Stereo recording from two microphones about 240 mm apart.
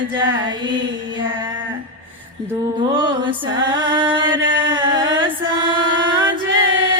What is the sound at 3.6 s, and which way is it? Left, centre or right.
Music, centre.